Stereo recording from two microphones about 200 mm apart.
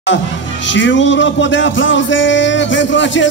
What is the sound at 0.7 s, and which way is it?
Speech, 65° left (ahead or behind).